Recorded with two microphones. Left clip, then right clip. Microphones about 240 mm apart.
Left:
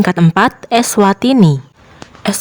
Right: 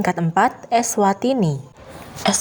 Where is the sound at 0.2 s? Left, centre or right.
Left.